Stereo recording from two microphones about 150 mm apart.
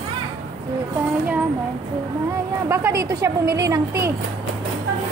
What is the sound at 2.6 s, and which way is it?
A woman's voice, 15° right (ahead or behind).